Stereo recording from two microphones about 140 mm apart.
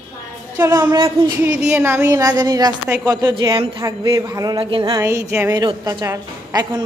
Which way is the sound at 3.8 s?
25° right (ahead or behind).